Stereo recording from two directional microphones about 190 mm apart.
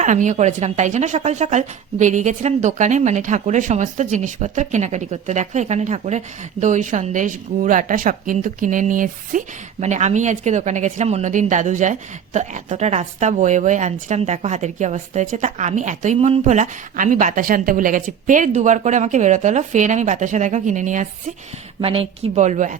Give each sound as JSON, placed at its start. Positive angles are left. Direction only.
{"t": 0.0, "sound": "a woman's voice", "side_deg": -40}
{"t": 21.8, "sound": "a woman's voice", "side_deg": -30}